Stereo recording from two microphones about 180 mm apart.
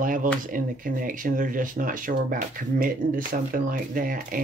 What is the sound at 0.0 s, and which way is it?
Speech, 50° right (ahead or behind).